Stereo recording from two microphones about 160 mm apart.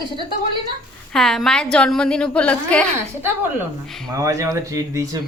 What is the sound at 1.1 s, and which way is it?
A woman's voice, centre (ahead or behind).